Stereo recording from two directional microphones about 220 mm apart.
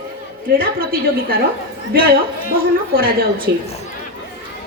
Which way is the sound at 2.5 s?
40° right (ahead or behind).